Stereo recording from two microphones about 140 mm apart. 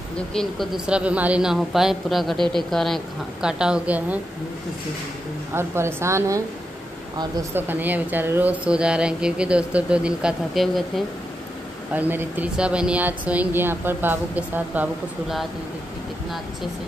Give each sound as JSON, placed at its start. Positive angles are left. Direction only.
{"t": 0.3, "sound": "a woman's voice", "side_deg": 5}
{"t": 0.8, "sound": "a woman's voice", "side_deg": -10}
{"t": 5.5, "sound": "a woman's voice", "side_deg": -15}
{"t": 7.5, "sound": "a woman's voice", "side_deg": -15}
{"t": 11.9, "sound": "a woman's voice", "side_deg": -15}